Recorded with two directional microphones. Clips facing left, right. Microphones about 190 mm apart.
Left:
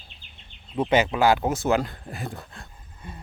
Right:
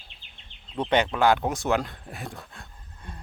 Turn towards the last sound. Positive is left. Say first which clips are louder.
# left 2 dB
turn(degrees=0)  # may be behind; listen again after turning